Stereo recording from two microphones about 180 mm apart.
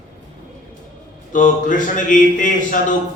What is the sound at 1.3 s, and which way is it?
A man's voice, 45° left (ahead or behind).